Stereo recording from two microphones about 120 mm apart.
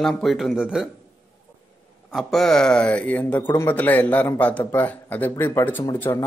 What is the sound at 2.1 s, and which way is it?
Speech, 5° left (ahead or behind).